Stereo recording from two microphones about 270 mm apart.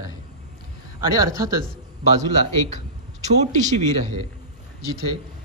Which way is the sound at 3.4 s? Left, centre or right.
Right.